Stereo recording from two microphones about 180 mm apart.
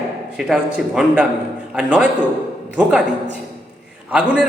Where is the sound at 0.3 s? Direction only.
5° right (ahead or behind).